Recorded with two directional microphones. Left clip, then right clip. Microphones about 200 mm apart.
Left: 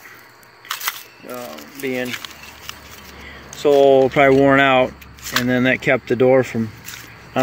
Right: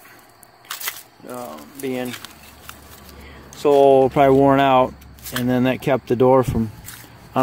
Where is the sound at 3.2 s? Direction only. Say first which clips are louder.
Left 1 dB; 10° right (ahead or behind).